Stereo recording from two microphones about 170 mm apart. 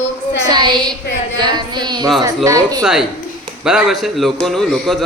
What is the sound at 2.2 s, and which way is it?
Speech, 20° right (ahead or behind).